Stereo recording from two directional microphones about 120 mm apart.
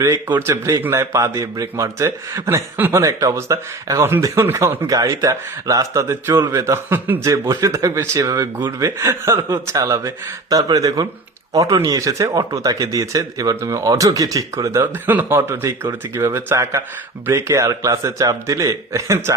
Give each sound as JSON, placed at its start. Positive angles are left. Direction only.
{"t": 0.3, "sound": "speech", "side_deg": -20}
{"t": 6.4, "sound": "a man's voice", "side_deg": -30}